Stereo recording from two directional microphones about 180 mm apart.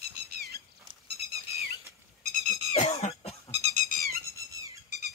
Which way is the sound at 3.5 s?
40° right (ahead or behind).